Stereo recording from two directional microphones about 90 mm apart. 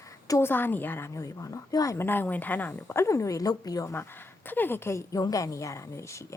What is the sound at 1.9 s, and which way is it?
A woman's voice, 25° left (ahead or behind).